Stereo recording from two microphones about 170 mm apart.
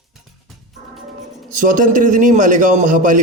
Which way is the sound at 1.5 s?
50° right (ahead or behind).